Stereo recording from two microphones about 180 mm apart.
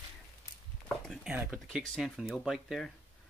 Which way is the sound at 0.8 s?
5° left (ahead or behind).